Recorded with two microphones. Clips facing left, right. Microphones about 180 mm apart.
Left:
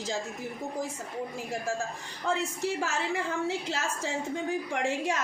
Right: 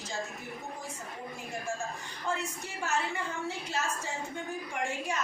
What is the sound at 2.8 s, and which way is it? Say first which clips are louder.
A woman's voice: left 2 dB; 90° left.